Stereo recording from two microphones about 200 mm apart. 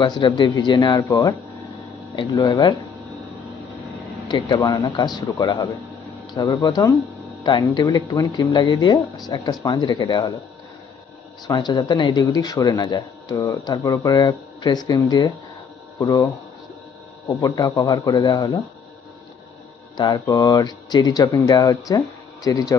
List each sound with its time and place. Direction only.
0.0 s speech: 20° left (ahead or behind)
4.3 s speech: 20° left (ahead or behind)
11.4 s speech: 20° left (ahead or behind)
17.3 s speech: 15° left (ahead or behind)
20.0 s speech: 20° left (ahead or behind)